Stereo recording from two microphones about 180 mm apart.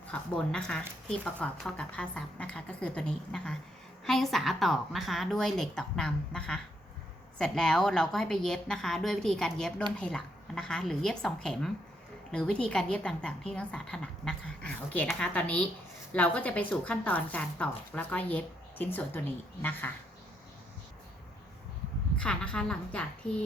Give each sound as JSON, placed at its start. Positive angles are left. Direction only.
{"t": 0.1, "sound": "a woman's voice", "side_deg": 5}
{"t": 22.2, "sound": "speech", "side_deg": 5}